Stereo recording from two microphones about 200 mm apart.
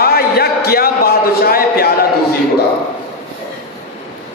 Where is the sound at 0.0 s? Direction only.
50° left (ahead or behind).